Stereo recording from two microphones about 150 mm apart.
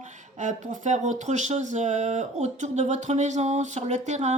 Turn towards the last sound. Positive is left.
turn(degrees=-50)  # may be behind; listen again after turning